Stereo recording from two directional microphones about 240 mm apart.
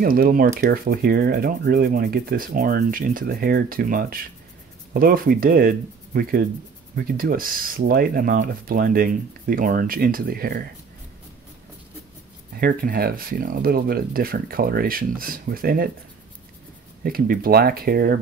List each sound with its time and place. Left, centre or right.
0.0 s speech: right
12.5 s speech: right
17.0 s speech: right